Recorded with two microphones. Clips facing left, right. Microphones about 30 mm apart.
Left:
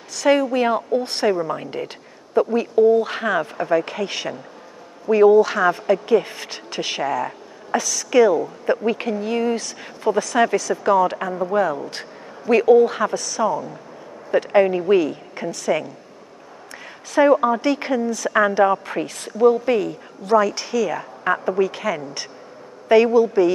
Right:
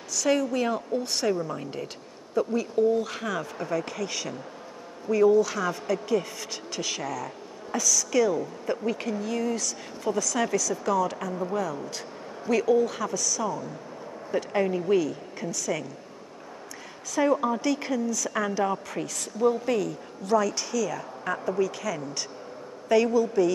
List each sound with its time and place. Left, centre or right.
0.1 s a woman's voice: left
17.1 s a woman's voice: left